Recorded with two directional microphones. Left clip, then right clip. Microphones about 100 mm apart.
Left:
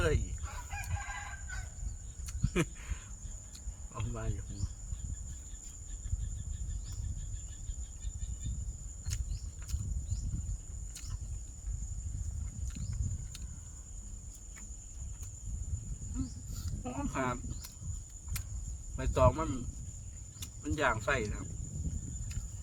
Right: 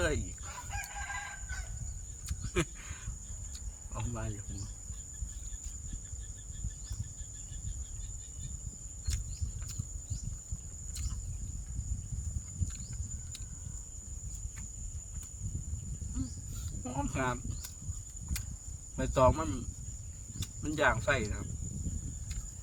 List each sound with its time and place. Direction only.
0.0 s crowing: 30° right (ahead or behind)
2.2 s a sound: 35° right (ahead or behind)
3.9 s speech: 30° right (ahead or behind)
16.8 s cricket: 20° right (ahead or behind)
18.9 s speech: 30° right (ahead or behind)